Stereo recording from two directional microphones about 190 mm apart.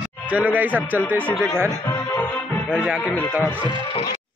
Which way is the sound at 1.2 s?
5° left (ahead or behind).